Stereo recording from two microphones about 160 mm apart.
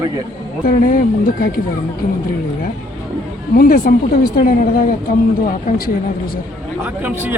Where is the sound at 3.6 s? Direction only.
60° left (ahead or behind).